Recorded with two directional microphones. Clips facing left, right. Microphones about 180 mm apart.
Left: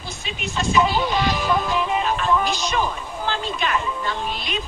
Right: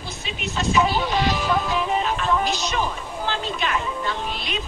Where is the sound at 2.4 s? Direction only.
50° left (ahead or behind).